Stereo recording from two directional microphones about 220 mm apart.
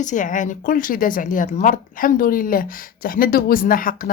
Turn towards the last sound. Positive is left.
turn(degrees=40)  # may be behind; listen again after turning